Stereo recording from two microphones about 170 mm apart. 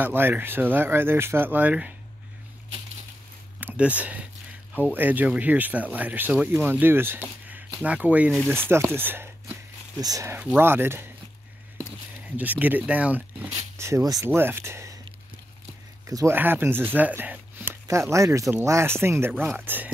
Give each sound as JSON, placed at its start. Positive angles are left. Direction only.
{"t": 0.0, "sound": "speech", "side_deg": -10}
{"t": 3.5, "sound": "speech", "side_deg": -10}
{"t": 12.4, "sound": "speech", "side_deg": -10}
{"t": 16.1, "sound": "speech", "side_deg": -15}